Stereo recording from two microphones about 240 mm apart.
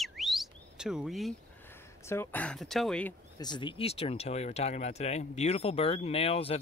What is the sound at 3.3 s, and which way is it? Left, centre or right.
Speech, centre.